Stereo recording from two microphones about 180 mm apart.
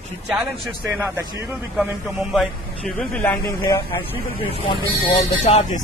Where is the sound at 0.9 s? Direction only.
15° right (ahead or behind).